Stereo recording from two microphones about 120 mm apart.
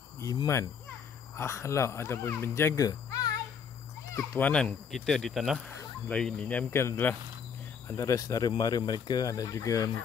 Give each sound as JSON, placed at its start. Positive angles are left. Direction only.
{"t": 0.2, "sound": "cricket", "side_deg": 30}
{"t": 1.3, "sound": "speech", "side_deg": 20}
{"t": 4.4, "sound": "speech", "side_deg": 10}
{"t": 6.0, "sound": "speech", "side_deg": 10}
{"t": 6.7, "sound": "speech", "side_deg": 20}